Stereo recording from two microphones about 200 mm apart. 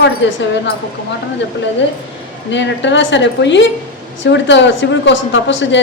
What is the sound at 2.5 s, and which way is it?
A woman's voice, 65° left (ahead or behind).